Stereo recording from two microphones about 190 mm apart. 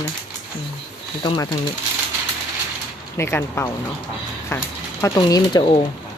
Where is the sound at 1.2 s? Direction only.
20° left (ahead or behind).